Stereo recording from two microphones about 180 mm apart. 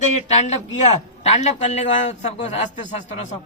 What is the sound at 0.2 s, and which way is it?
A man's voice, 40° left (ahead or behind).